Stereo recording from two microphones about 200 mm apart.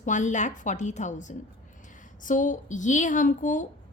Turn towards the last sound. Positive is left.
turn(degrees=40)  # may be behind; listen again after turning